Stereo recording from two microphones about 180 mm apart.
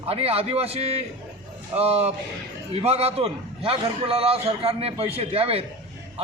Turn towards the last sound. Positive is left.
turn(degrees=-35)  # may be behind; listen again after turning